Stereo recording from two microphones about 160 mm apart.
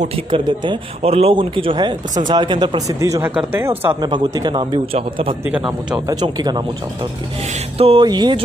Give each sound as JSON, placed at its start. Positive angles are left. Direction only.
{"t": 0.0, "sound": "a man's voice", "side_deg": -35}
{"t": 3.8, "sound": "speech", "side_deg": -25}
{"t": 5.4, "sound": "a man's voice", "side_deg": -15}
{"t": 6.0, "sound": "speech", "side_deg": -25}